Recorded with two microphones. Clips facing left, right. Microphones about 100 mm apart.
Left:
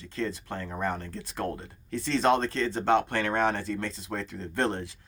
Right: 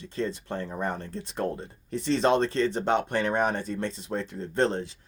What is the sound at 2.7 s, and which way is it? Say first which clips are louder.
Speech: left 1 dB; 20° right (ahead or behind).